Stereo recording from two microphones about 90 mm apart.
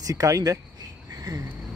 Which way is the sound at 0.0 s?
40° right (ahead or behind).